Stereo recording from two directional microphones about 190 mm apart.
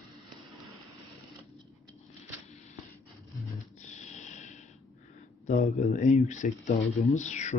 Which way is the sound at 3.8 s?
40° left (ahead or behind).